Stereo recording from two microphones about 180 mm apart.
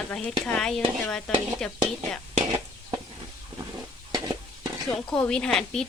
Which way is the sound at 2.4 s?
25° right (ahead or behind).